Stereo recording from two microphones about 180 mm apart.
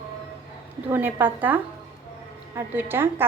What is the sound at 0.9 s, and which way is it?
A woman's voice, 10° right (ahead or behind).